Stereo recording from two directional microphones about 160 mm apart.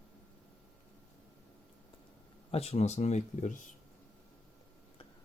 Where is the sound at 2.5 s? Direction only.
40° left (ahead or behind).